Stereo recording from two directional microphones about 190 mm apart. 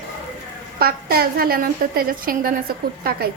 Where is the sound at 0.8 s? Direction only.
55° right (ahead or behind).